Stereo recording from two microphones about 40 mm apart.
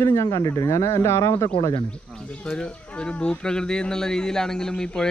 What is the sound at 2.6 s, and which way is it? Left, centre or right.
Speech, left.